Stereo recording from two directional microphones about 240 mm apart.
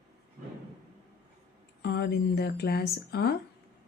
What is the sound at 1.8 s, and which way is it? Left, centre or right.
Speech, left.